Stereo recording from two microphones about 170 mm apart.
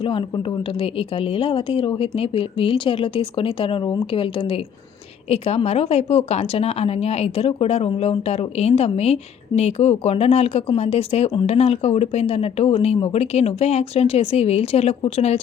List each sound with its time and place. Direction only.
0.0 s a woman's voice: 30° left (ahead or behind)